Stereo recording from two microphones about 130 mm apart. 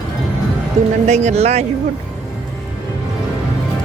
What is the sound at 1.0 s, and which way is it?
Speech, 60° right (ahead or behind).